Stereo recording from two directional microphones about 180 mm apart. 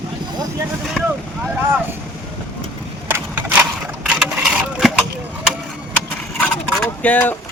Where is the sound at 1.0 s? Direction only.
5° left (ahead or behind).